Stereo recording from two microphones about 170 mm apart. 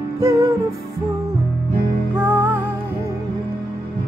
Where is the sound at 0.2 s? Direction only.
15° right (ahead or behind).